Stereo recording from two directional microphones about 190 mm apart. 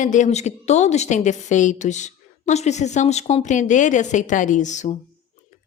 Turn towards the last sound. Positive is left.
turn(degrees=40)  # may be behind; listen again after turning